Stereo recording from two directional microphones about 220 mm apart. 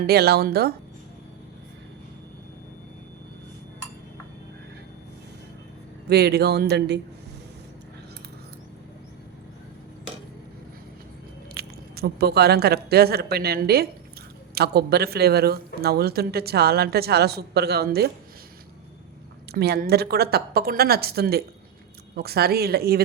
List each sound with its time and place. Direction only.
0.0 s speech: 45° right (ahead or behind)
6.1 s speech: 45° right (ahead or behind)
11.5 s speech: 45° right (ahead or behind)
19.5 s speech: 45° right (ahead or behind)